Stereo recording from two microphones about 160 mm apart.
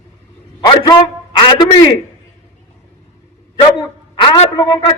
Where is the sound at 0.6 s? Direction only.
25° left (ahead or behind).